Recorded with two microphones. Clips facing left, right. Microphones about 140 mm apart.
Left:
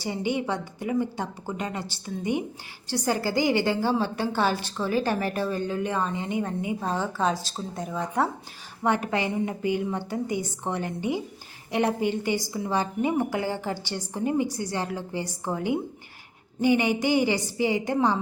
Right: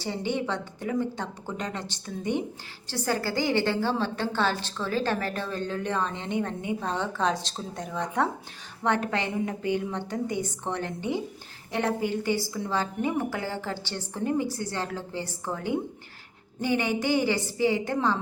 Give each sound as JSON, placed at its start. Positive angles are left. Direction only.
{"t": 0.0, "sound": "a woman's voice", "side_deg": 10}